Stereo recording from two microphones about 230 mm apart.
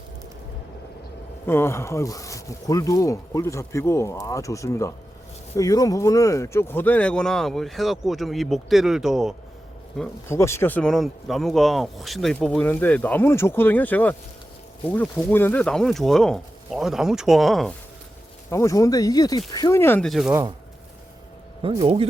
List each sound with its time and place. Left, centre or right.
1.5 s speech: centre
10.0 s speech: centre
18.5 s speech: centre
21.6 s speech: right